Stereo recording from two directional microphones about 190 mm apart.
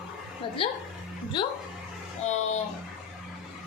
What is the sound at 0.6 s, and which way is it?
Speech, 30° left (ahead or behind).